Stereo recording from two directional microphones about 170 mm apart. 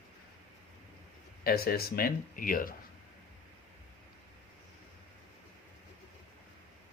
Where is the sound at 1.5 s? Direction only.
65° left (ahead or behind).